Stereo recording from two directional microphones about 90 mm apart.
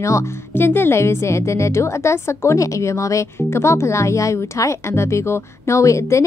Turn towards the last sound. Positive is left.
turn(degrees=35)  # may be behind; listen again after turning